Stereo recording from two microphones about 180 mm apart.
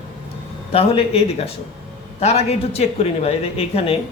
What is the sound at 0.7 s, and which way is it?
Speech, 35° left (ahead or behind).